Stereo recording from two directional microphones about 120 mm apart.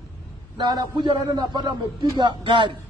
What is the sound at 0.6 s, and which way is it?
A man's voice, 40° right (ahead or behind).